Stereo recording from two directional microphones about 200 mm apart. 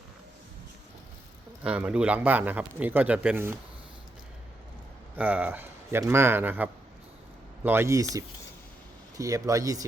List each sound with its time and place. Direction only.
1.6 s a man's voice: 5° right (ahead or behind)
5.1 s a man's voice: 10° right (ahead or behind)